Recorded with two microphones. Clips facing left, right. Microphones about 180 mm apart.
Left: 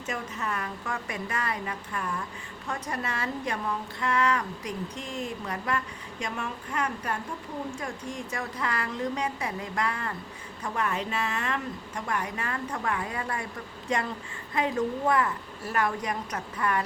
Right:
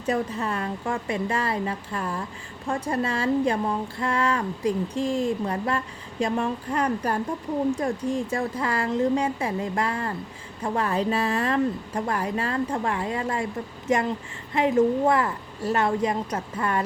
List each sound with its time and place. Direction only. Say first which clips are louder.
0.0 s a woman's voice: right 8 dB; 35° right (ahead or behind)